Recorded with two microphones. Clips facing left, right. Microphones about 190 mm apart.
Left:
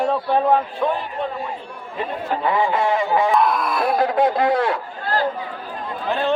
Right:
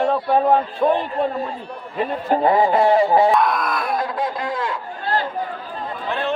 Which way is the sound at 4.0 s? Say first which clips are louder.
Left 6 dB; 70° left (ahead or behind).